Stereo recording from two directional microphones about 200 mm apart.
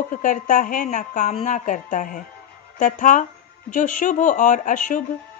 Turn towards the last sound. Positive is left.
turn(degrees=40)  # may be behind; listen again after turning